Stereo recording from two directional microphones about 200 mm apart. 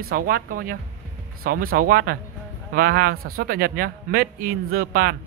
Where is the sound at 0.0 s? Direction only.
45° right (ahead or behind).